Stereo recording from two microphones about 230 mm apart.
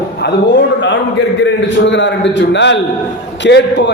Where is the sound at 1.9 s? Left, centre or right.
Left.